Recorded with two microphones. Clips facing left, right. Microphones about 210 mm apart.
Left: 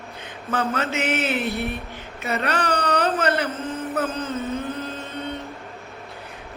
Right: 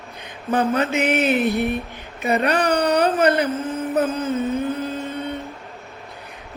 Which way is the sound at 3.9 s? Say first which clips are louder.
Right 6 dB; 15° right (ahead or behind).